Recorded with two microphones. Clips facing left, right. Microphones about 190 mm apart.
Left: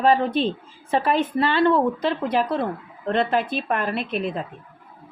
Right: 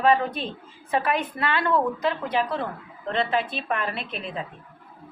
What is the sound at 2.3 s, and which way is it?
A woman's voice, 40° left (ahead or behind).